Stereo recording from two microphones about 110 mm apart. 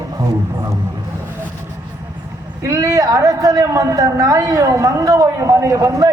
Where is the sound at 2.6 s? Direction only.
35° right (ahead or behind).